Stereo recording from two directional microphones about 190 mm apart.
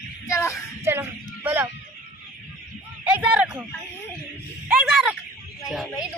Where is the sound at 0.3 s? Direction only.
15° left (ahead or behind).